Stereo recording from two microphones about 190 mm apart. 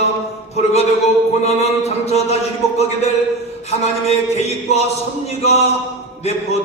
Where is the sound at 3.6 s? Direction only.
35° left (ahead or behind).